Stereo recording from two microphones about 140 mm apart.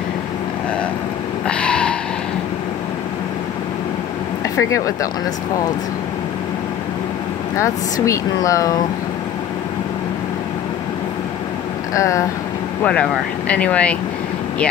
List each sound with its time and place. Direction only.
1.5 s a sound: 5° left (ahead or behind)
4.6 s speech: 20° left (ahead or behind)
7.5 s speech: 20° left (ahead or behind)
11.9 s speech: 20° left (ahead or behind)
12.8 s speech: 10° left (ahead or behind)